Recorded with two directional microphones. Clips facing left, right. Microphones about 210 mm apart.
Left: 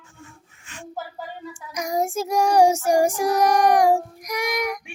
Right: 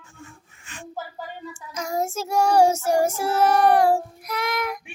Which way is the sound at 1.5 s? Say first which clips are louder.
Left 3 dB; 15° left (ahead or behind).